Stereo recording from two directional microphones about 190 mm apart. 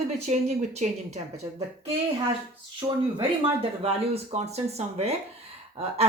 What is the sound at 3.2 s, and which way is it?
Speech, 30° right (ahead or behind).